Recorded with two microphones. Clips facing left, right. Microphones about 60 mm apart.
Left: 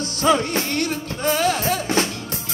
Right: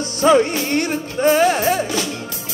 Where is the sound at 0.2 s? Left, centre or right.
Right.